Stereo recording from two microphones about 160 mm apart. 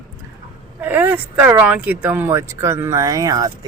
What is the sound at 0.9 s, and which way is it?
Speech, 10° right (ahead or behind).